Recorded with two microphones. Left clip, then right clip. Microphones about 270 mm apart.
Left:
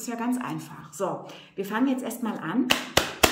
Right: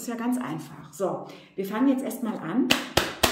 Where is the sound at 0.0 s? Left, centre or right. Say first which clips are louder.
Even; centre.